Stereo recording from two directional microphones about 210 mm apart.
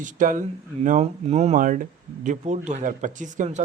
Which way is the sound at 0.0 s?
40° right (ahead or behind).